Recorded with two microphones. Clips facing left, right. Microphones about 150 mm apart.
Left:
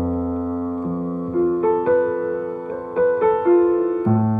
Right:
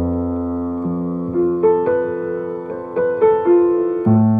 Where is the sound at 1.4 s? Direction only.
5° right (ahead or behind).